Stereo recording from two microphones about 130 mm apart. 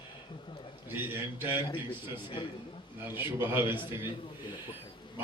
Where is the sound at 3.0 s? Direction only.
15° right (ahead or behind).